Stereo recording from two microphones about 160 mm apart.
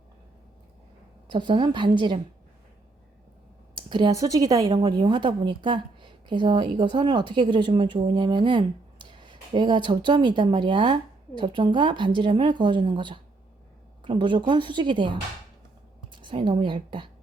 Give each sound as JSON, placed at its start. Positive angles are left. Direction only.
{"t": 1.3, "sound": "speech", "side_deg": -30}
{"t": 3.8, "sound": "a woman's voice", "side_deg": -30}